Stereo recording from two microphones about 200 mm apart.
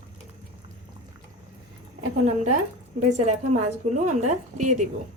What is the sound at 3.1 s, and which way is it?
A woman's voice, 35° right (ahead or behind).